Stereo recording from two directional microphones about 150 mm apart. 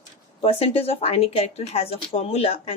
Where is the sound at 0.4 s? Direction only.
40° left (ahead or behind).